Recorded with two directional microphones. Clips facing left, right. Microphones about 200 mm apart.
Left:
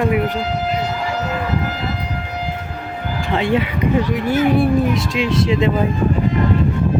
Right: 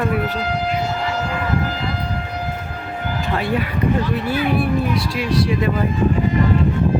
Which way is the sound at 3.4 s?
20° left (ahead or behind).